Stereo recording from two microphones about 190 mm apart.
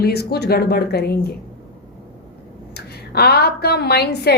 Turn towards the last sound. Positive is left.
turn(degrees=60)  # may be behind; listen again after turning